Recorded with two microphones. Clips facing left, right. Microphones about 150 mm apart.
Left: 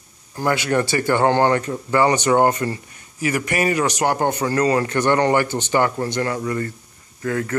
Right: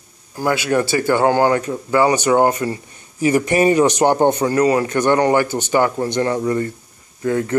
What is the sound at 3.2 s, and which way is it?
A man's voice, 30° right (ahead or behind).